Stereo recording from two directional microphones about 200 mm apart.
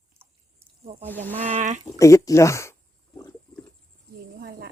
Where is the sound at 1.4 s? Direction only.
35° right (ahead or behind).